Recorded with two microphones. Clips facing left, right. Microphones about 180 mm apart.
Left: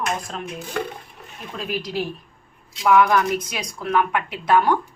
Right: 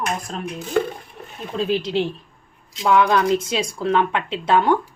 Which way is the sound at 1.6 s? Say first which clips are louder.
Right 6 dB; 25° right (ahead or behind).